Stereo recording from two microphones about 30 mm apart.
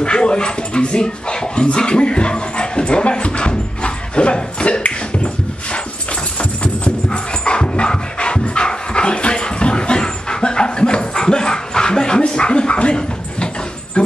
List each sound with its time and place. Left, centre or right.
0.0 s dog: left
7.1 s dog: left
14.0 s dog: left